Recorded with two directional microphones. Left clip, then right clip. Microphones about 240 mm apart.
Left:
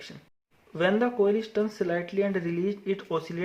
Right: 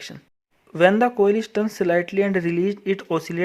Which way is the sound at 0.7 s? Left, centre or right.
Right.